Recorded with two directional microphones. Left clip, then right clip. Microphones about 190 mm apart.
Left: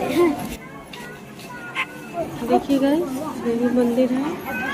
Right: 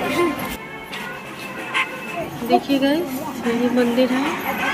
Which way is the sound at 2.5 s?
10° left (ahead or behind).